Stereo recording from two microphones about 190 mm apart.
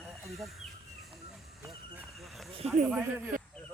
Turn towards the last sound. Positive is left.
turn(degrees=-10)  # may be behind; listen again after turning